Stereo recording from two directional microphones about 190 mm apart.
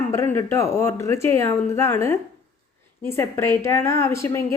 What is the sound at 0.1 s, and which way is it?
A woman's voice, 15° left (ahead or behind).